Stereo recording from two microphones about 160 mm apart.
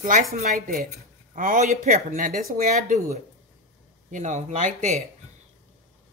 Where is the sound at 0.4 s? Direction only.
65° right (ahead or behind); by 5.0 s 45° right (ahead or behind).